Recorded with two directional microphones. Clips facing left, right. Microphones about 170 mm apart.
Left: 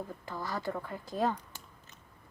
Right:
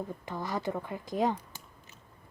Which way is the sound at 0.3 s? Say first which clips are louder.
Right 2 dB; 20° right (ahead or behind).